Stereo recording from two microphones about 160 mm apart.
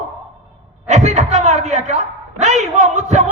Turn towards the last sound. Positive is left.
turn(degrees=-45)  # may be behind; listen again after turning